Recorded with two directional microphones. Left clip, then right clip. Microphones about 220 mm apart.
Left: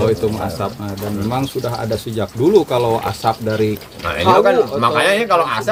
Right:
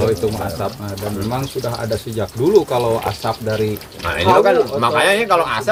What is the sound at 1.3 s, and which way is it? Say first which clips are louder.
Speech: left 4 dB; 50° left (ahead or behind).